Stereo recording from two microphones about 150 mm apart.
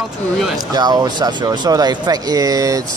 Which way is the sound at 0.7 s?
25° right (ahead or behind).